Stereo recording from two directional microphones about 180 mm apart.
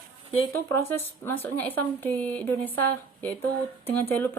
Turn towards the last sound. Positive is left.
turn(degrees=10)  # may be behind; listen again after turning